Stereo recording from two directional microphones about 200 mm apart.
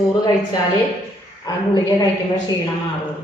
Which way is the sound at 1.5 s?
20° left (ahead or behind).